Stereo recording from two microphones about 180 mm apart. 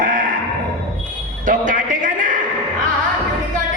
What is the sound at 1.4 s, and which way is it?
Music, 45° right (ahead or behind).